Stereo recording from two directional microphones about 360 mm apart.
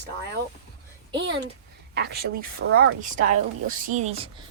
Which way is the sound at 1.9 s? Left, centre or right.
Right.